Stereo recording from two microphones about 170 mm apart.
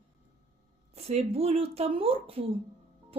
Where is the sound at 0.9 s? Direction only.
40° right (ahead or behind).